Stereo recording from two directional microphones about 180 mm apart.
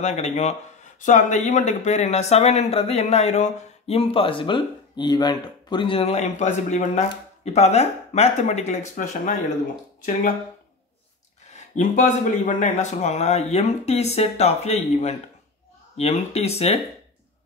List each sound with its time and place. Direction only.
0.0 s speech: 35° left (ahead or behind)
11.5 s speech: 45° left (ahead or behind)